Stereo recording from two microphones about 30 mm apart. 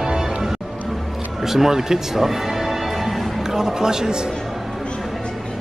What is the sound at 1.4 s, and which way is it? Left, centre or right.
Speech, centre.